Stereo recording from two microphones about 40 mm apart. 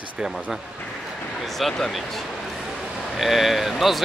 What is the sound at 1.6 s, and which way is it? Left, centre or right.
Speech, centre.